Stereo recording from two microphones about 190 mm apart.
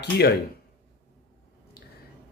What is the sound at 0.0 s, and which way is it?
Speech, 60° left (ahead or behind).